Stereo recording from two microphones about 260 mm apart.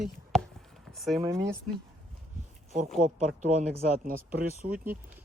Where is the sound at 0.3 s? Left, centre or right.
Centre.